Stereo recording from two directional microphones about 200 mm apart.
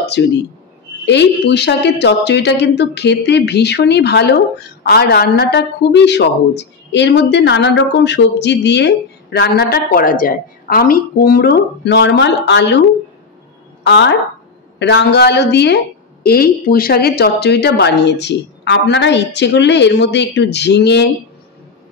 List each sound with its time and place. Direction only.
0.2 s a woman's voice: 65° left (ahead or behind)
13.8 s a woman's voice: 60° left (ahead or behind)